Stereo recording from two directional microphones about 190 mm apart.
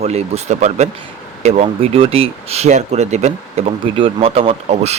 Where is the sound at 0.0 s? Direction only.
35° right (ahead or behind).